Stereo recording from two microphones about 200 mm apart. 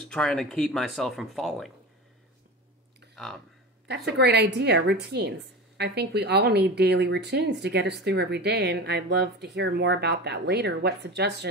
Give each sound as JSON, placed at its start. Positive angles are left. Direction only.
{"t": 0.1, "sound": "speech", "side_deg": 5}
{"t": 3.2, "sound": "speech", "side_deg": 0}
{"t": 3.8, "sound": "speech", "side_deg": -55}